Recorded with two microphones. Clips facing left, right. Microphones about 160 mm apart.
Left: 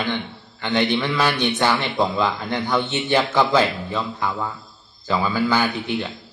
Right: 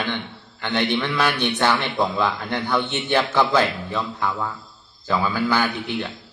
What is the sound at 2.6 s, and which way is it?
Speech, 20° left (ahead or behind).